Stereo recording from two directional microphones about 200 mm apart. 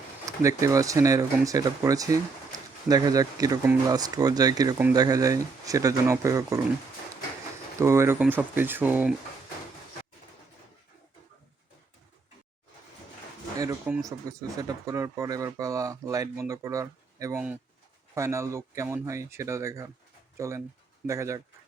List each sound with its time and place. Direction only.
0.3 s speech: 15° right (ahead or behind)
7.8 s speech: 15° right (ahead or behind)
13.6 s speech: 15° right (ahead or behind)